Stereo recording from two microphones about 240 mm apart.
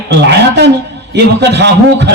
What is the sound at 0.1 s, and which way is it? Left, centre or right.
A man's voice, right.